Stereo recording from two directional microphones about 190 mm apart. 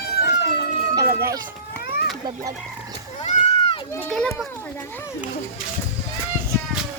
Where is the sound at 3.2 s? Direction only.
35° left (ahead or behind).